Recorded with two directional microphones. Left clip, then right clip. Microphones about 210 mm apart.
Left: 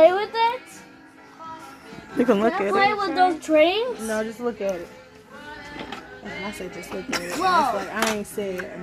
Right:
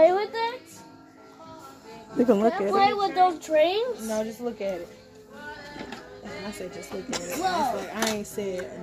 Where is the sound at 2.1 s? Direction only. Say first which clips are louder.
Left 1 dB; 10° right (ahead or behind).